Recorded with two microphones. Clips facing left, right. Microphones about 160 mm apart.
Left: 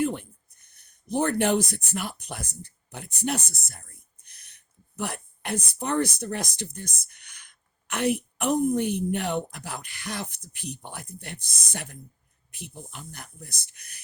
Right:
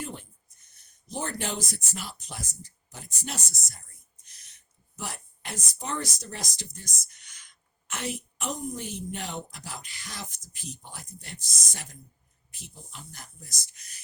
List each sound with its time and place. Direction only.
0.0 s speech: 60° left (ahead or behind)